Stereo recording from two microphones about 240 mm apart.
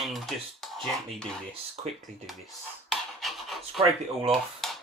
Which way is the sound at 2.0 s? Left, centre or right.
Centre.